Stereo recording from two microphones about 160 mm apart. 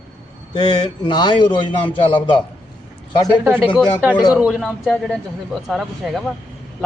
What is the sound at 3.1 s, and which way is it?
Speech, 25° left (ahead or behind).